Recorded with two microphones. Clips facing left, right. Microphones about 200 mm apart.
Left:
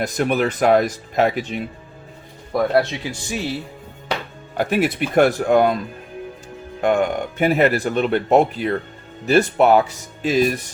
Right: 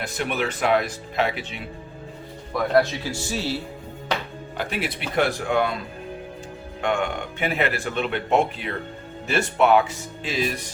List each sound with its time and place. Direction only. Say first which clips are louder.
0.0 s speech: left 7 dB; 40° left (ahead or behind)
3.0 s speech: left 1 dB; 15° left (ahead or behind)
4.5 s speech: left 9 dB; 45° left (ahead or behind)
6.8 s speech: left 6 dB; 40° left (ahead or behind)